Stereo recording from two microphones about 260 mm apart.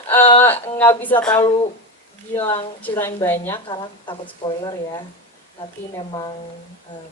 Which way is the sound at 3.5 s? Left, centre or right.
Centre.